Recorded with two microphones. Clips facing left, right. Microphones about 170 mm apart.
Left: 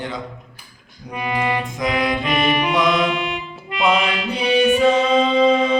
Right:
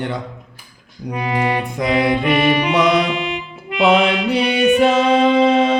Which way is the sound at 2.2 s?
70° right (ahead or behind).